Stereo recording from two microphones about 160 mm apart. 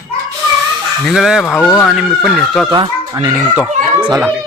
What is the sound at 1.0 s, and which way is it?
Speech, 5° right (ahead or behind).